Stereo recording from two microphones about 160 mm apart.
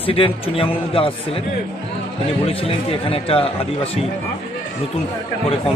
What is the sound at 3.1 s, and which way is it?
Speech, 35° left (ahead or behind).